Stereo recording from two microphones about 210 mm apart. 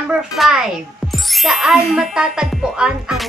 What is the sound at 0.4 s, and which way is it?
Speech, centre (ahead or behind).